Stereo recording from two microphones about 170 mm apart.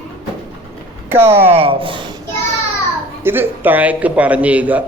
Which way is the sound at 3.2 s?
10° right (ahead or behind).